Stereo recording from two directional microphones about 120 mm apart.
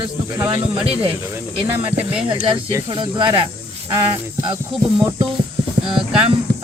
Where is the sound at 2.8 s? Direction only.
40° right (ahead or behind).